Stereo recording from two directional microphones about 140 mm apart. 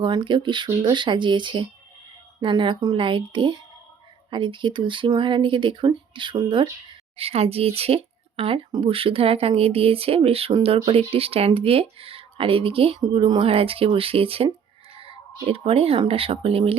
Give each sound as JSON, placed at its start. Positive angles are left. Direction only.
{"t": 0.0, "sound": "speech", "side_deg": -35}